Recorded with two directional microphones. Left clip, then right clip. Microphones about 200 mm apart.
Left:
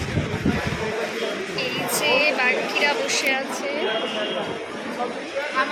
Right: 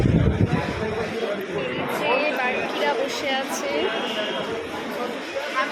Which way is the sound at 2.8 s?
15° right (ahead or behind).